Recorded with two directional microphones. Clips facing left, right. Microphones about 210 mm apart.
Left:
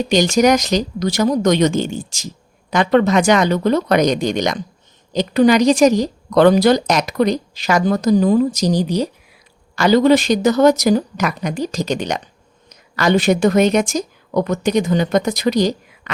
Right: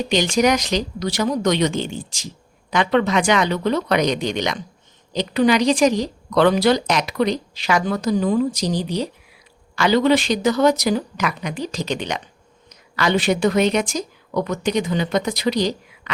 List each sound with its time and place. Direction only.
0.1 s speech: 45° left (ahead or behind)